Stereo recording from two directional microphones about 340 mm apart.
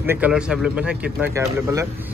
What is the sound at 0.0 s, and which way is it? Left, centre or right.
Speech, centre.